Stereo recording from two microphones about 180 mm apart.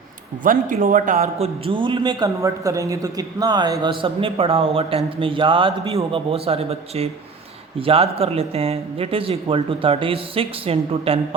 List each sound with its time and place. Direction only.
0.4 s a man's voice: 50° right (ahead or behind); by 11.3 s 30° right (ahead or behind)